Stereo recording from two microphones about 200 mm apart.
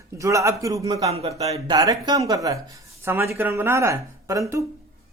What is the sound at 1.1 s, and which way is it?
Speech, 30° right (ahead or behind).